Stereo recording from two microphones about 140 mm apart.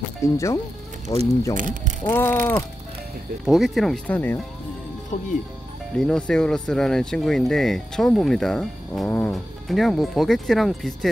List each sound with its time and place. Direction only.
0.2 s speech: 20° left (ahead or behind)
1.6 s speech: 65° right (ahead or behind)
2.0 s speech: 15° left (ahead or behind)
3.4 s speech: centre (ahead or behind)
4.1 s speech: 10° left (ahead or behind)
5.1 s speech: 55° left (ahead or behind)
5.9 s speech: 5° left (ahead or behind)